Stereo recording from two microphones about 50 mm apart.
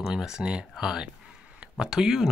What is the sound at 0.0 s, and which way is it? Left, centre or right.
Speech, centre.